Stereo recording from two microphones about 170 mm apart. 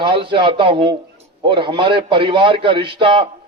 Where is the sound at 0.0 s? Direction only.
30° right (ahead or behind).